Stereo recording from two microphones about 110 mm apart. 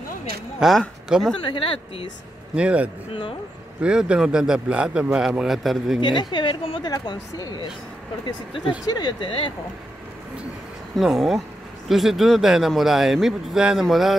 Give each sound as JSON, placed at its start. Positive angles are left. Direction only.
{"t": 0.6, "sound": "a man's voice", "side_deg": 0}
{"t": 1.4, "sound": "a woman's voice", "side_deg": 50}
{"t": 2.5, "sound": "speech", "side_deg": -10}
{"t": 5.9, "sound": "a woman's voice", "side_deg": 45}
{"t": 6.8, "sound": "speech", "side_deg": 40}
{"t": 8.8, "sound": "a woman's voice", "side_deg": 40}
{"t": 11.0, "sound": "a man's voice", "side_deg": 0}